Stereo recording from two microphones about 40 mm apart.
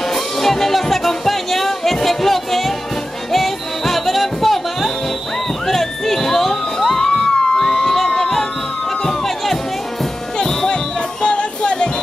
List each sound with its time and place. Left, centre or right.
0.1 s music: centre
5.7 s crowd: centre
10.4 s music: centre
11.2 s music: left